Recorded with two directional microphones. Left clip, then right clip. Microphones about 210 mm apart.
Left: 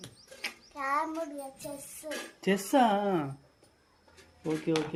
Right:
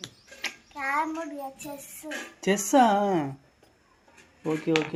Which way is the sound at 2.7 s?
20° right (ahead or behind).